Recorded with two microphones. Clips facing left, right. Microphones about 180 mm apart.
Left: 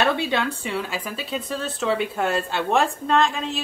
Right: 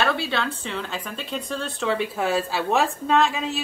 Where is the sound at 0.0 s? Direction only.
15° left (ahead or behind).